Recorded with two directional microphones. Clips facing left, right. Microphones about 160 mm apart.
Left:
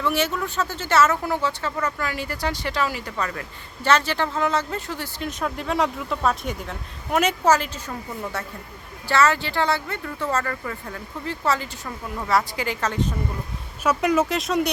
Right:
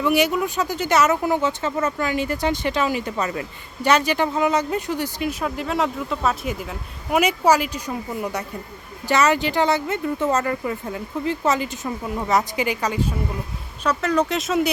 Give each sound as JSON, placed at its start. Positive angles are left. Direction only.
{"t": 0.0, "sound": "speech", "side_deg": -15}
{"t": 13.8, "sound": "speech", "side_deg": 10}
{"t": 14.3, "sound": "speech", "side_deg": 0}